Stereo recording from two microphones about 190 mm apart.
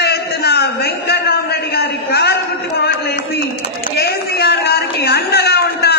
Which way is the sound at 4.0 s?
55° left (ahead or behind).